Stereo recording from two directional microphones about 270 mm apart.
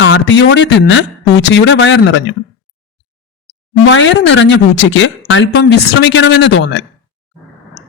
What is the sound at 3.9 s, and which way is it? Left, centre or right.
Speech, left.